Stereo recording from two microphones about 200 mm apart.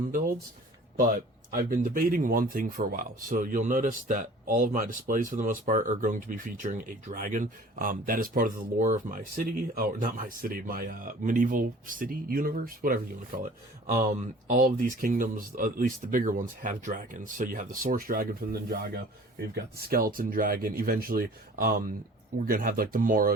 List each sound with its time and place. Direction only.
0.9 s speech: 45° right (ahead or behind)